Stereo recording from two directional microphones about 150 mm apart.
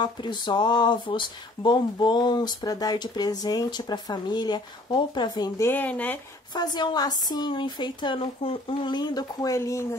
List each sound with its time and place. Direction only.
0.0 s speech: 30° left (ahead or behind)
5.7 s speech: 10° left (ahead or behind)
6.5 s speech: 30° left (ahead or behind)